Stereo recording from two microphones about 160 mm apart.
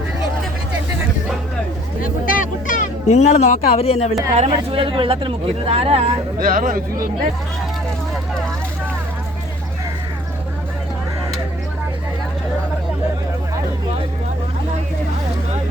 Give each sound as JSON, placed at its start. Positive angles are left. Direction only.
{"t": 2.0, "sound": "a sound", "side_deg": 60}
{"t": 4.4, "sound": "speech", "side_deg": -35}
{"t": 6.4, "sound": "speech", "side_deg": -60}